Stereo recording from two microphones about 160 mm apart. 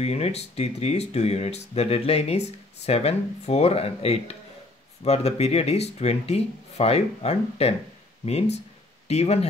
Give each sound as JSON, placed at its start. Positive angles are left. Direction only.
{"t": 0.0, "sound": "speech", "side_deg": 40}